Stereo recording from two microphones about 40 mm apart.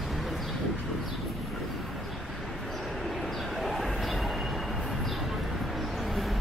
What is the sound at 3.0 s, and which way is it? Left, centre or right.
Train, centre.